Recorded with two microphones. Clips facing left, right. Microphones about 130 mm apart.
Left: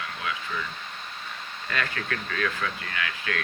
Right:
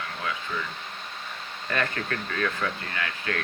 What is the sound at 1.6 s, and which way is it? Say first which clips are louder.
Speech: right 2 dB; 30° right (ahead or behind).